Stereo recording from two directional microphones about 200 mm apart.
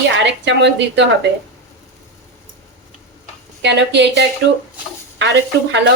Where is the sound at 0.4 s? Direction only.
60° right (ahead or behind).